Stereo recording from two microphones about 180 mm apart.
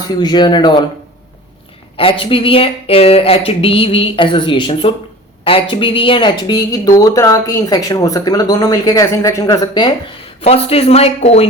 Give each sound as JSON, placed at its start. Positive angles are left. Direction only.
{"t": 0.2, "sound": "speech", "side_deg": 25}
{"t": 2.0, "sound": "speech", "side_deg": 30}
{"t": 10.4, "sound": "speech", "side_deg": 35}